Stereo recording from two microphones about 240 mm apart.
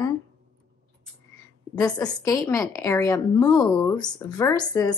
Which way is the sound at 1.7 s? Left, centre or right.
Centre.